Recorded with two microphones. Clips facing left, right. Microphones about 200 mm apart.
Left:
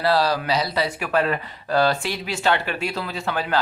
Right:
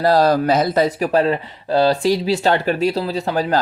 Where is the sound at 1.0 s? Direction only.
35° right (ahead or behind).